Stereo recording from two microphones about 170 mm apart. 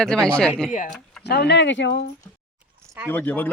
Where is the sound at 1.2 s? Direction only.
85° left.